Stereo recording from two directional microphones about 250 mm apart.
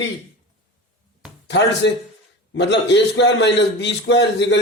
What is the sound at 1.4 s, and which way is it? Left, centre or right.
A man's voice, left.